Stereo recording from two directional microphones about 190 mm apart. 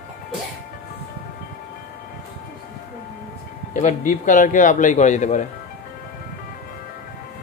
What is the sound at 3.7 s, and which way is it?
A man's voice, 40° left (ahead or behind).